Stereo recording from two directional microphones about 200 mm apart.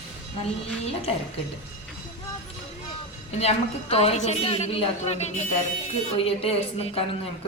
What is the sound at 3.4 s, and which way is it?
A woman's voice, 30° left (ahead or behind).